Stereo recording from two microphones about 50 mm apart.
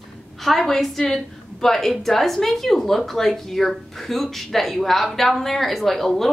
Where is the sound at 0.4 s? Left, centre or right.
Centre.